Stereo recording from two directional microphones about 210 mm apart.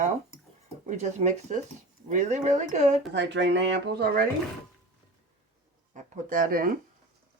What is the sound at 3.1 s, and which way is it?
Speech, 60° right (ahead or behind).